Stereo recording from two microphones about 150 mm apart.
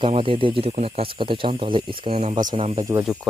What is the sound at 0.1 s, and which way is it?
Speech, 35° right (ahead or behind).